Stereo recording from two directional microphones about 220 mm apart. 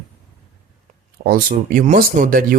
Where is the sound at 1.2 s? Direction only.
40° right (ahead or behind).